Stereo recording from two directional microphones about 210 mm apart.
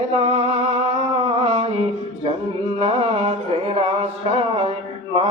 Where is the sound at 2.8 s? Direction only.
30° right (ahead or behind).